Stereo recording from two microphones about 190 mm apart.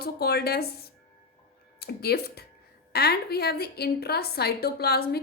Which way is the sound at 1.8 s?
55° left (ahead or behind).